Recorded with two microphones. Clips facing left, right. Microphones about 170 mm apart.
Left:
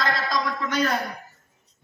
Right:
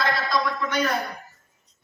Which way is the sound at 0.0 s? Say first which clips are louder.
Right 1 dB; 40° left (ahead or behind).